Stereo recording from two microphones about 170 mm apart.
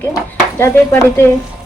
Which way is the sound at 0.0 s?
15° left (ahead or behind).